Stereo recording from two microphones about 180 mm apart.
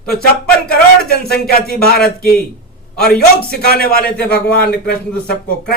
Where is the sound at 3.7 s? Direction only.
55° left (ahead or behind).